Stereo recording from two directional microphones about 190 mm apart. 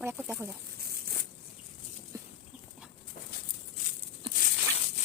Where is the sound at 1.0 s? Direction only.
55° right (ahead or behind).